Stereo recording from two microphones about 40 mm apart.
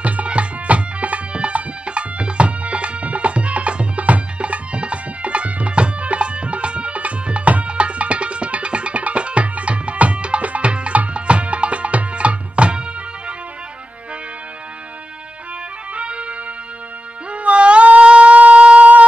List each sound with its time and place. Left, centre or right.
0.0 s music: right
11.1 s tabla: right
15.9 s music: right
17.3 s yodeling: right